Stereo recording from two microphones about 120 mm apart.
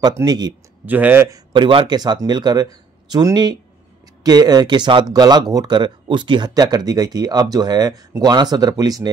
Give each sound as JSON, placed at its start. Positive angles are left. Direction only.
{"t": 0.2, "sound": "speech", "side_deg": -35}
{"t": 0.8, "sound": "a man's voice", "side_deg": -15}
{"t": 1.5, "sound": "speech", "side_deg": -45}